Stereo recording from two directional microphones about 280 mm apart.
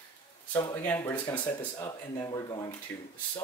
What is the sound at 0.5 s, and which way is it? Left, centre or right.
Speech, centre.